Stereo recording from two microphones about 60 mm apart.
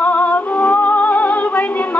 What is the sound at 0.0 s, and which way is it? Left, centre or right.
Music, left.